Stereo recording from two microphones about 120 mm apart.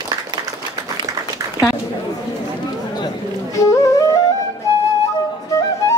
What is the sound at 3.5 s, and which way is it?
Music, 25° left (ahead or behind).